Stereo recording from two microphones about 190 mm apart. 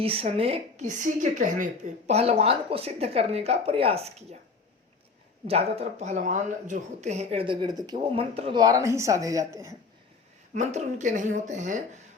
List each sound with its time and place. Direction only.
0.0 s a woman's voice: 30° right (ahead or behind)
5.5 s speech: 35° right (ahead or behind); by 9.7 s 15° right (ahead or behind)
10.5 s a woman's voice: 40° right (ahead or behind)